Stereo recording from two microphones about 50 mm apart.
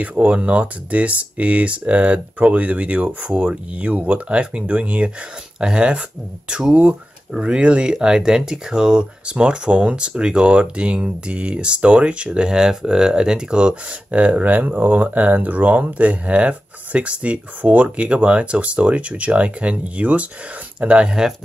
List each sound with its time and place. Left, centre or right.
0.0 s speech: right
3.3 s speech: centre
3.7 s speech: right